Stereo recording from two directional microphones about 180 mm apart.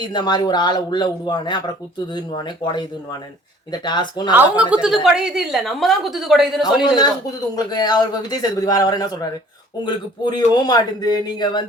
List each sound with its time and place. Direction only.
0.1 s speech: 25° left (ahead or behind)
4.5 s a woman's voice: 5° right (ahead or behind)
6.8 s speech: 25° left (ahead or behind)